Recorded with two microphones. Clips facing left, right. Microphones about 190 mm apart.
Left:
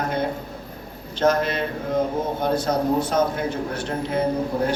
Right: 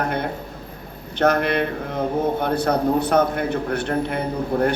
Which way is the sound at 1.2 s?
60° right (ahead or behind).